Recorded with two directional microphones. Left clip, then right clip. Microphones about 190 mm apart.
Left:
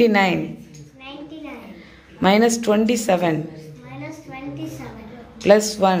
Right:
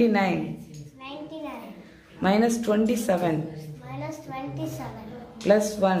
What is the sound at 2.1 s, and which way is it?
A woman's voice, 25° left (ahead or behind).